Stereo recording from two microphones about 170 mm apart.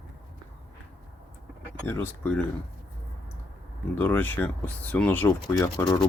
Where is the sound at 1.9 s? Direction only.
10° left (ahead or behind).